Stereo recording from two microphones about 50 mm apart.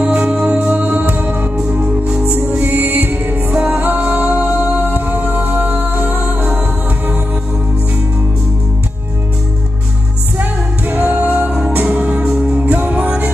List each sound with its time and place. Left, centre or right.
0.0 s music: right
2.6 s music: right
10.3 s music: right
12.7 s music: right